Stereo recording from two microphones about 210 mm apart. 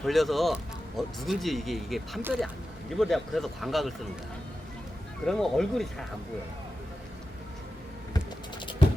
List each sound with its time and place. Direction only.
0.0 s speech: centre (ahead or behind)
5.2 s speech: centre (ahead or behind)
8.1 s typing: 20° left (ahead or behind)